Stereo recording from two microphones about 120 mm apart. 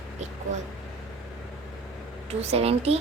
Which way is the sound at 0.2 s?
75° right (ahead or behind).